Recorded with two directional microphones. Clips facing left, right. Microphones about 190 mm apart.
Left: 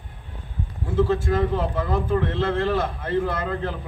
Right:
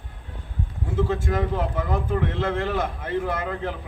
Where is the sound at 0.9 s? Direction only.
15° right (ahead or behind).